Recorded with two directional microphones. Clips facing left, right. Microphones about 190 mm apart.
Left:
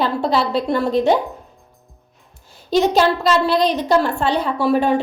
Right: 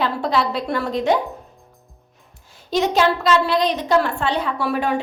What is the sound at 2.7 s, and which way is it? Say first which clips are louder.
A woman's voice: left 3 dB; 35° left (ahead or behind).